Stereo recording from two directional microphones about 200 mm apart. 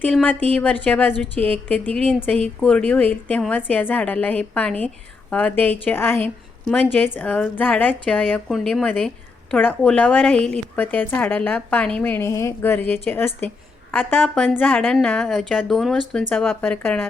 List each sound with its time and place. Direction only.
0.0 s a woman's voice: 5° left (ahead or behind)